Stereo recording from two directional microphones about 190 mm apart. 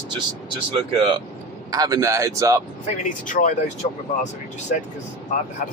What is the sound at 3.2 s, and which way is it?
Speech, 45° left (ahead or behind).